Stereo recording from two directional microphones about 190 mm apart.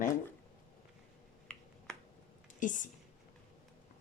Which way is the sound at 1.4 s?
5° left (ahead or behind).